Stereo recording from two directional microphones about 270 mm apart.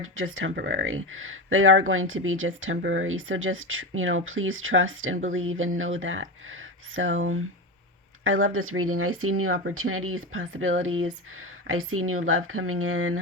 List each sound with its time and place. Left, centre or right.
0.0 s speech: right